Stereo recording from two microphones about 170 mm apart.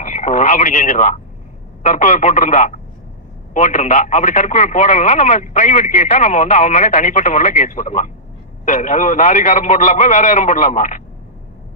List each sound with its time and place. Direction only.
0.0 s radio: 45° left (ahead or behind)
1.8 s a man's voice: 45° left (ahead or behind)